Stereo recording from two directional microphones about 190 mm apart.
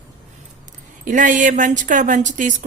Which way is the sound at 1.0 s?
40° right (ahead or behind).